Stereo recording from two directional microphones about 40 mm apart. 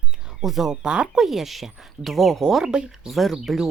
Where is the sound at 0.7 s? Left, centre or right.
Right.